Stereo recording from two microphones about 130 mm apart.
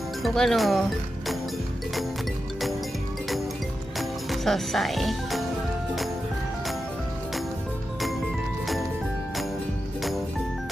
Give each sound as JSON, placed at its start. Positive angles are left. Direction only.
{"t": 0.2, "sound": "speech", "side_deg": 0}
{"t": 3.9, "sound": "music", "side_deg": 0}
{"t": 10.0, "sound": "music", "side_deg": 0}